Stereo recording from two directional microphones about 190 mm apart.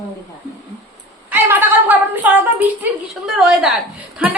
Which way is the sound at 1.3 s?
10° right (ahead or behind).